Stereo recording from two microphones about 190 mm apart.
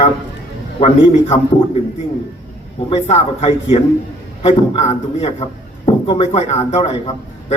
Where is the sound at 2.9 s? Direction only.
30° left (ahead or behind).